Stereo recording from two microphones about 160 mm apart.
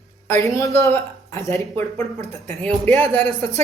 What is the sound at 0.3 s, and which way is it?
A woman's voice, 15° left (ahead or behind).